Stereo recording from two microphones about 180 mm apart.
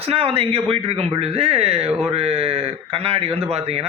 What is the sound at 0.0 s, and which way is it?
A man's voice, 35° right (ahead or behind).